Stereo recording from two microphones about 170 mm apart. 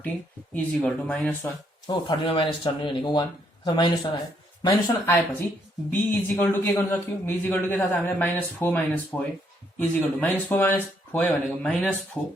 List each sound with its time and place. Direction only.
0.5 s a man's voice: 10° left (ahead or behind)
1.9 s speech: 30° left (ahead or behind)
5.9 s a man's voice: 10° left (ahead or behind)